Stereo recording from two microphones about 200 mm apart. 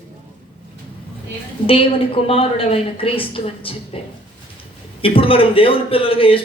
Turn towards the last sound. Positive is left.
turn(degrees=25)  # may be behind; listen again after turning